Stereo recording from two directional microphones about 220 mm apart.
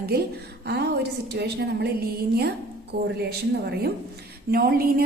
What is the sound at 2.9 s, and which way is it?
Speech, 50° right (ahead or behind).